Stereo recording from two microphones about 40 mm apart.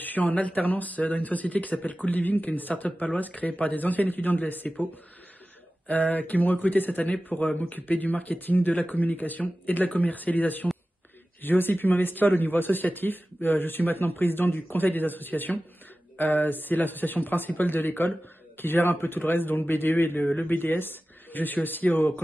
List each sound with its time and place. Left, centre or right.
0.0 s speech: left
5.9 s speech: left
11.4 s a man's voice: left